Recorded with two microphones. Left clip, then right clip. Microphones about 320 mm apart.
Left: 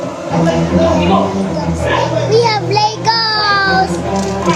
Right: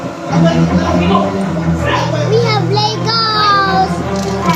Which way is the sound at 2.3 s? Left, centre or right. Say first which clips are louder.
Left 2 dB; centre.